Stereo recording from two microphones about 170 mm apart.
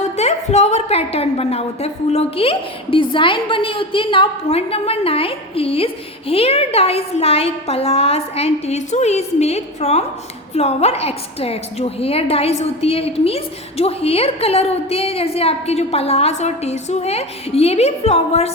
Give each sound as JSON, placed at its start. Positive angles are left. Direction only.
{"t": 0.0, "sound": "a woman's voice", "side_deg": 40}